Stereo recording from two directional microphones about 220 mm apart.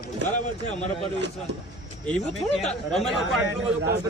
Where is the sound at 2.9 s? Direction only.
Centre (ahead or behind).